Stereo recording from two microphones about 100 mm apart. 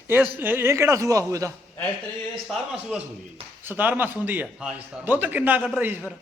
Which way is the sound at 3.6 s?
20° right (ahead or behind).